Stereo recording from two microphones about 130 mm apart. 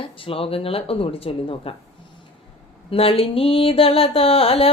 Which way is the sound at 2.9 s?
50° left (ahead or behind).